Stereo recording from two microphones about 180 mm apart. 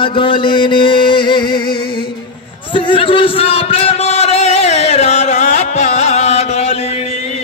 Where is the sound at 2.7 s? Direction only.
30° left (ahead or behind).